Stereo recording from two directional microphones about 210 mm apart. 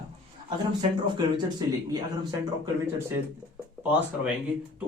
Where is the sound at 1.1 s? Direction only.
20° right (ahead or behind).